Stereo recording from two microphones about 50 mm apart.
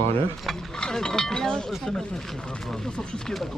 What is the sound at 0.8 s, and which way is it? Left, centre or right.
Speech, centre.